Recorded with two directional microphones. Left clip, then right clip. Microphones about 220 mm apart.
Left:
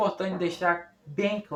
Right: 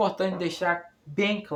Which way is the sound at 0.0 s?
50° right (ahead or behind).